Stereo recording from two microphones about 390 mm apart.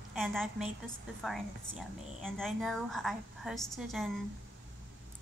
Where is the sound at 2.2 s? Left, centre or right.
Centre.